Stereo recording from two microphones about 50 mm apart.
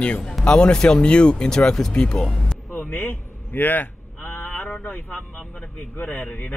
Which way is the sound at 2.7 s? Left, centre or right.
Left.